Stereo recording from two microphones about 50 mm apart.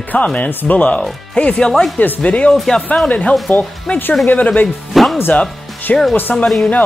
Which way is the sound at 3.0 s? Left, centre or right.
Left.